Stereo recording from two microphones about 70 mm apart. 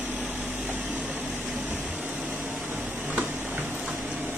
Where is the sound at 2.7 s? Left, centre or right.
Right.